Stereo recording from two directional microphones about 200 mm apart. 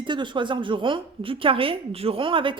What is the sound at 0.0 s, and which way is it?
A woman's voice, 25° right (ahead or behind).